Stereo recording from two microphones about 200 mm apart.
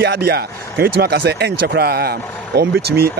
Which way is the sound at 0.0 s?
55° right (ahead or behind).